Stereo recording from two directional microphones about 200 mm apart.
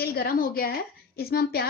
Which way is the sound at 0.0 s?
50° left (ahead or behind).